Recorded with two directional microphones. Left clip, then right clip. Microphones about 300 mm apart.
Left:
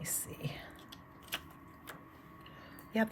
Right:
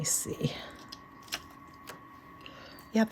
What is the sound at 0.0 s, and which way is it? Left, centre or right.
Speech, centre.